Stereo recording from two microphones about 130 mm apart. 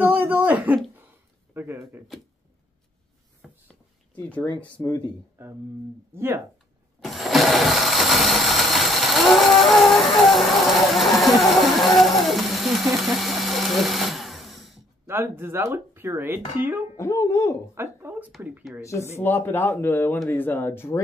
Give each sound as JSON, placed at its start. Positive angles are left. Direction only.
{"t": 0.0, "sound": "a sound", "side_deg": -15}
{"t": 1.5, "sound": "speech", "side_deg": -15}
{"t": 4.6, "sound": "speech", "side_deg": 15}
{"t": 5.4, "sound": "speech", "side_deg": -15}
{"t": 7.0, "sound": "blender", "side_deg": 0}
{"t": 15.0, "sound": "speech", "side_deg": -15}
{"t": 16.9, "sound": "speech", "side_deg": 20}
{"t": 17.7, "sound": "speech", "side_deg": -15}
{"t": 18.8, "sound": "speech", "side_deg": 25}